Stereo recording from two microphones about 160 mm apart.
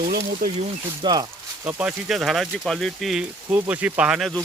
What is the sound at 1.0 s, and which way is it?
Speech, 30° right (ahead or behind).